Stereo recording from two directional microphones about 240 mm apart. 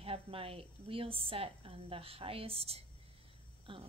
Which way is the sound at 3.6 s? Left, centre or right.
Right.